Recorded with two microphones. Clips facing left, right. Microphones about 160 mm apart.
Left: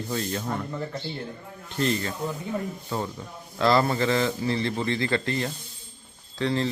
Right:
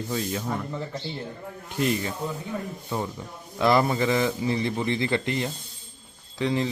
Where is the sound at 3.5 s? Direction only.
15° right (ahead or behind).